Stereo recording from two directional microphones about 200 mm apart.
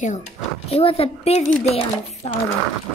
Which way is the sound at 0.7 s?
30° left (ahead or behind).